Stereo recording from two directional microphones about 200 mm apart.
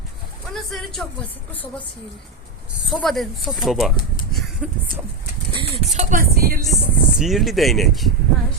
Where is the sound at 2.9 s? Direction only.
Centre (ahead or behind).